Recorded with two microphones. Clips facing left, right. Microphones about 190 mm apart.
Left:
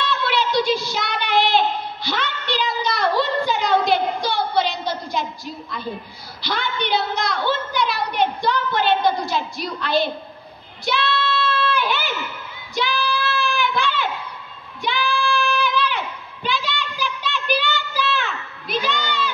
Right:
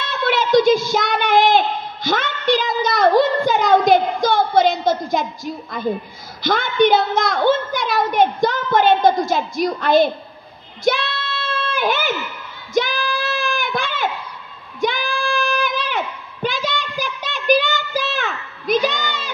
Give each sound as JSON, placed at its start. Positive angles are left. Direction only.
{"t": 0.0, "sound": "child singing", "side_deg": -50}
{"t": 2.0, "sound": "a sound", "side_deg": -45}
{"t": 10.9, "sound": "child singing", "side_deg": -50}